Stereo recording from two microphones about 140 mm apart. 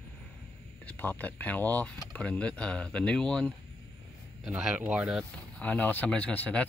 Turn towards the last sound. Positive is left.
turn(degrees=10)  # may be behind; listen again after turning